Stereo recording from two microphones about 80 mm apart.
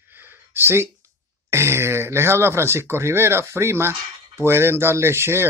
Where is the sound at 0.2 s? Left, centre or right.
Right.